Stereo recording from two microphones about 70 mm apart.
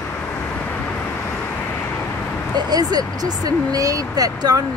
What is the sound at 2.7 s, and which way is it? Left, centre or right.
Speech, right.